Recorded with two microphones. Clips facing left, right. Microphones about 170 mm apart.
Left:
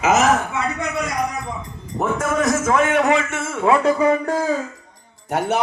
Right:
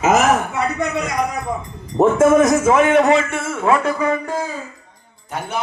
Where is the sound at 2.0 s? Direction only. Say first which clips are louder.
Right 9 dB; 25° right (ahead or behind).